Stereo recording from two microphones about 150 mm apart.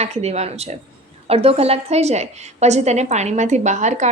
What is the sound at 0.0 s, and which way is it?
A woman's voice, 45° right (ahead or behind).